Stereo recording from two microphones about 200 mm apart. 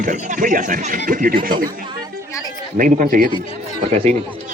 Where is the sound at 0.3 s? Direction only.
40° right (ahead or behind).